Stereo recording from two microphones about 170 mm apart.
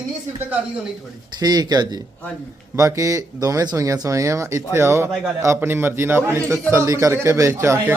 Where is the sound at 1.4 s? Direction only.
25° right (ahead or behind).